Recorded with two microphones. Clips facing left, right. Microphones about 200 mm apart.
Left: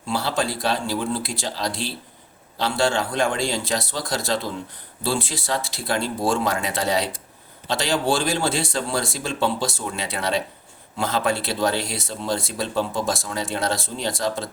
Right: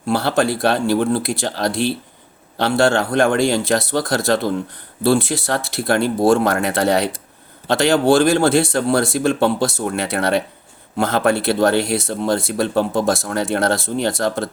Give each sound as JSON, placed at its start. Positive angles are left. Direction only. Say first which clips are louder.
{"t": 0.0, "sound": "speech", "louder": "right 7 dB", "side_deg": -65}